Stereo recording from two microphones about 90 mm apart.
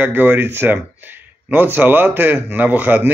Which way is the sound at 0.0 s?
20° right (ahead or behind).